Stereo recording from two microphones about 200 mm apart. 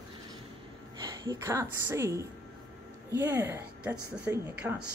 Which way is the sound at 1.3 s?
15° right (ahead or behind).